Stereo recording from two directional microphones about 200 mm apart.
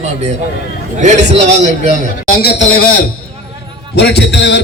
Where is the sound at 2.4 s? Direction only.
55° left (ahead or behind).